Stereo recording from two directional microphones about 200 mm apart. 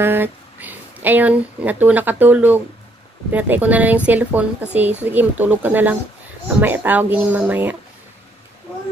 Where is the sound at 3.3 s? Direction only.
10° right (ahead or behind).